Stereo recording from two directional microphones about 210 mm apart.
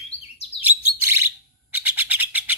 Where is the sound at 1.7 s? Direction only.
10° right (ahead or behind).